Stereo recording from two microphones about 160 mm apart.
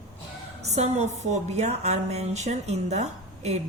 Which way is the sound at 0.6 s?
45° right (ahead or behind).